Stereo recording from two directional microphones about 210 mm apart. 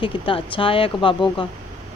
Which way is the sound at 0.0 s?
25° left (ahead or behind).